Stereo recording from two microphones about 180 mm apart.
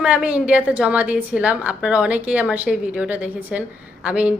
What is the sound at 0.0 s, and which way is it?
A woman's voice, 5° right (ahead or behind).